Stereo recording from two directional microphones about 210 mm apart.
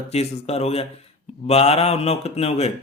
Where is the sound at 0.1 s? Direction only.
30° left (ahead or behind).